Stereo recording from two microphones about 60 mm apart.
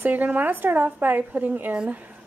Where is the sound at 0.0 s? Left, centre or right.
Right.